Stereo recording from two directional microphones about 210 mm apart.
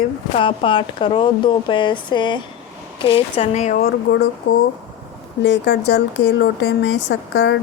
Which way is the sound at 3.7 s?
50° left (ahead or behind).